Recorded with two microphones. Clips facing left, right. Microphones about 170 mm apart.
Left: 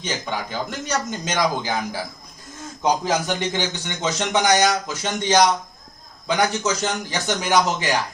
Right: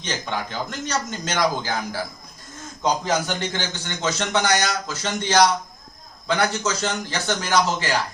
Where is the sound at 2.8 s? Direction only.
15° left (ahead or behind).